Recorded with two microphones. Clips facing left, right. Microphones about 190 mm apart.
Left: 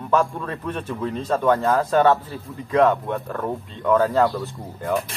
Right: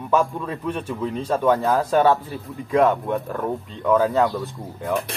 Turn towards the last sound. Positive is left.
turn(degrees=0)  # may be behind; listen again after turning